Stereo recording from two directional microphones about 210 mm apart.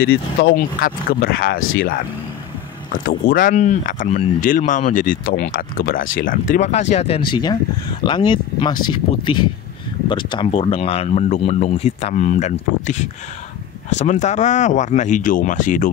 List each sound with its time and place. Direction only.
0.0 s speech: 50° left (ahead or behind)
2.9 s speech: 45° left (ahead or behind)